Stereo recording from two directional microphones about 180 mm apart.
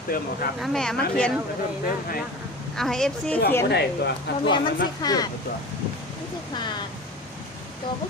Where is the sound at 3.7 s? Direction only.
60° left (ahead or behind).